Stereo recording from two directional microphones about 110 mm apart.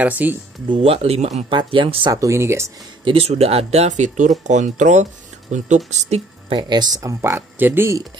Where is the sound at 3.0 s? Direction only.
65° right (ahead or behind); by 6.2 s 90° right.